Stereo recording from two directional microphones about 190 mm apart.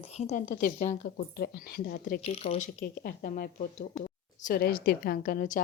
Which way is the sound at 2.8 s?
50° left (ahead or behind).